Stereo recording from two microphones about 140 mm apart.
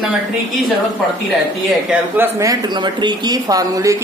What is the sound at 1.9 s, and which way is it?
Speech, 15° right (ahead or behind).